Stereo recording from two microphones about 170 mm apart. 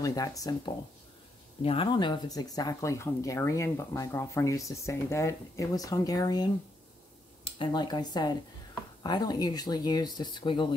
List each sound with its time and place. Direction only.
0.0 s speech: 20° left (ahead or behind)
1.6 s speech: 35° left (ahead or behind)
7.5 s speech: 25° left (ahead or behind)